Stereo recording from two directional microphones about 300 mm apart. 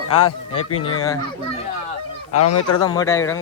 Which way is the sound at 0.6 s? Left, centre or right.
Left.